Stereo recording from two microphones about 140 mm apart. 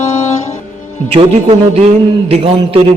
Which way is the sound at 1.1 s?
45° right (ahead or behind).